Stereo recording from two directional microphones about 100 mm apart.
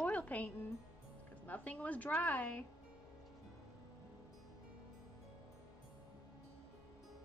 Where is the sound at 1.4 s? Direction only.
15° left (ahead or behind).